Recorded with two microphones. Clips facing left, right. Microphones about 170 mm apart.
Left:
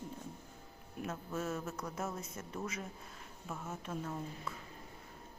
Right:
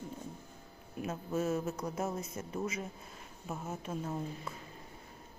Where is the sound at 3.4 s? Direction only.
25° right (ahead or behind).